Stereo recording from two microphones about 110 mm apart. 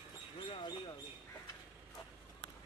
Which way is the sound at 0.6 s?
40° left (ahead or behind).